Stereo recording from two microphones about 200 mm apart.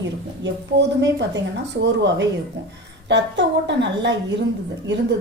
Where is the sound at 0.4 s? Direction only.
60° right (ahead or behind).